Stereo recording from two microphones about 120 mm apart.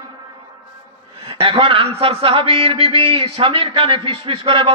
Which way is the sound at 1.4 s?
50° right (ahead or behind).